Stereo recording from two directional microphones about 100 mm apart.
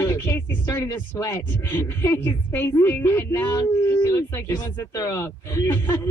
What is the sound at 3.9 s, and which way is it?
A woman's voice, 25° left (ahead or behind).